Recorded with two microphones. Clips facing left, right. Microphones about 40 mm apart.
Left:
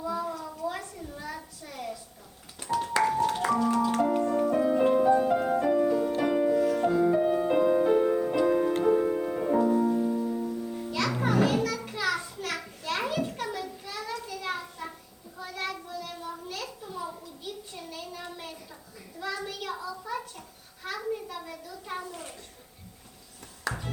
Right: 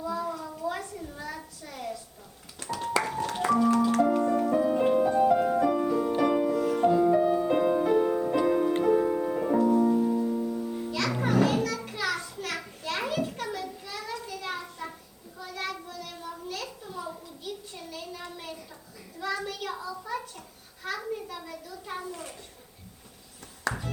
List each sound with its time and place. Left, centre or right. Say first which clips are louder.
0.0 s a sound: even; centre
3.0 s music: left 4 dB; centre
5.7 s music: left 1 dB; centre
7.6 s music: left 3 dB; centre
9.8 s keyboard: right 2 dB; centre
10.5 s music: right 1 dB; centre
11.9 s children playing: left 1 dB; centre
15.4 s a sound: even; centre
20.8 s children playing: even; centre